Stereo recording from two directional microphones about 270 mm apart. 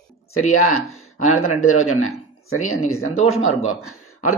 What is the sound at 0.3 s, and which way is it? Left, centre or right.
Speech, left.